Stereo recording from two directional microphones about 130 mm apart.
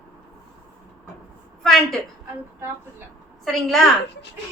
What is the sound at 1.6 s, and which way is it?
Speech, 5° left (ahead or behind).